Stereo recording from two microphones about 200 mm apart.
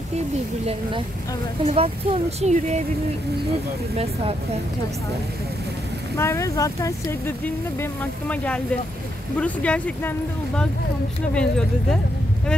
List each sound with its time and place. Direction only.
1.6 s speech: 30° right (ahead or behind)
3.9 s speech: 30° right (ahead or behind)
6.1 s speech: 15° left (ahead or behind)